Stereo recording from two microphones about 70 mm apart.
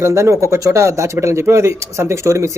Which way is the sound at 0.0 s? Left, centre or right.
Right.